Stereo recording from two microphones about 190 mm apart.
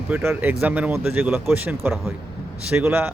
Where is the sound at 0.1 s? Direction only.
10° right (ahead or behind).